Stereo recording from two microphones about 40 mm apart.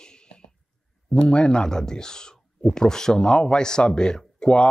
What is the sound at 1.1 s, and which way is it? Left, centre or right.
Speech, left.